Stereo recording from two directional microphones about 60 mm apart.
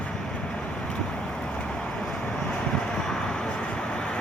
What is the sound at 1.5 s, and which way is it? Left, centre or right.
Vehicle, centre.